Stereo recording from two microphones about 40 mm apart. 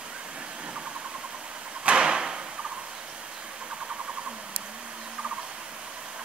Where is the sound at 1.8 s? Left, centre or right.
Right.